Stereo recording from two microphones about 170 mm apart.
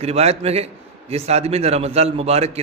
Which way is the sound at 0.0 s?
35° right (ahead or behind).